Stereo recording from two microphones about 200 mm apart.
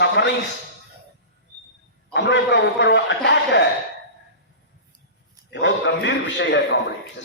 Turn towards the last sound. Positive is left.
turn(degrees=65)  # may be behind; listen again after turning